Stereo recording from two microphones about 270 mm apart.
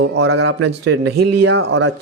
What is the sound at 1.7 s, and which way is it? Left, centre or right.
Speech, right.